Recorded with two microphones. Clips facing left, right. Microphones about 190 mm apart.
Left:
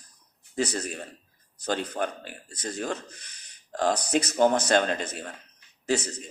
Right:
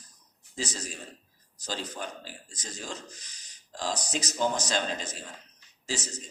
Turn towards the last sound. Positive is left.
turn(degrees=60)  # may be behind; listen again after turning